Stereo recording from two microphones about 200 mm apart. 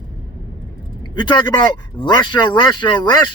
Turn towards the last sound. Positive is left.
turn(degrees=20)  # may be behind; listen again after turning